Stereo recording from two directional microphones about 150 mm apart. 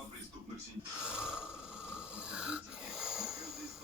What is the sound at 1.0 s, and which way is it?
Snoring, 5° right (ahead or behind).